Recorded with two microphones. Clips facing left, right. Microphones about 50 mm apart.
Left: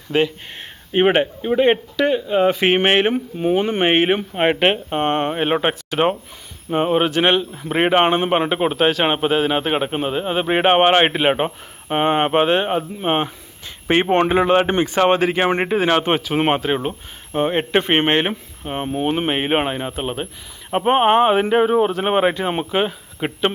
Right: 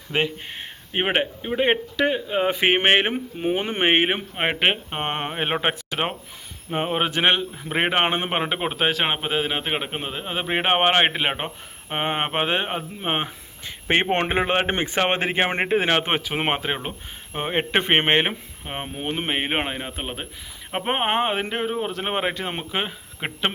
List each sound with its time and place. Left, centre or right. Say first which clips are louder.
0.1 s speech: left 5 dB; centre
0.4 s a man's voice: even; centre
13.2 s a sound: left 3 dB; centre
14.1 s speech: left 6 dB; right
16.0 s a man's voice: left 6 dB; centre
18.9 s a man's voice: left 7 dB; centre